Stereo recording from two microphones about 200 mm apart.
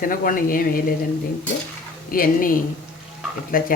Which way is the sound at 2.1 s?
45° left (ahead or behind).